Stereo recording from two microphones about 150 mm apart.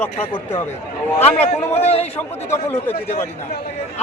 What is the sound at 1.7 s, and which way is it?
Speech, 45° left (ahead or behind).